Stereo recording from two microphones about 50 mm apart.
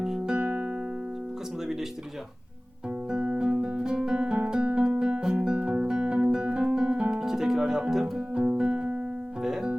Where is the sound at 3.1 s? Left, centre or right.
Centre.